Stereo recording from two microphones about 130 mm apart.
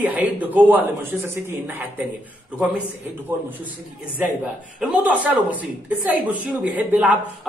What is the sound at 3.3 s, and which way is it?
Speech, 15° right (ahead or behind).